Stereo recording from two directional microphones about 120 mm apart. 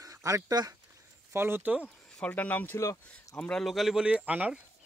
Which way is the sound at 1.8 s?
15° left (ahead or behind).